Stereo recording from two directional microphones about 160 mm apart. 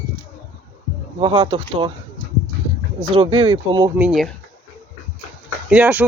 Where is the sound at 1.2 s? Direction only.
30° right (ahead or behind).